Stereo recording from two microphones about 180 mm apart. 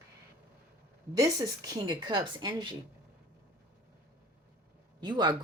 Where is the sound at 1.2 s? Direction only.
20° right (ahead or behind).